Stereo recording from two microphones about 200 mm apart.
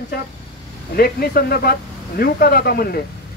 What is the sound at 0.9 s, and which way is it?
Speech, 50° left (ahead or behind).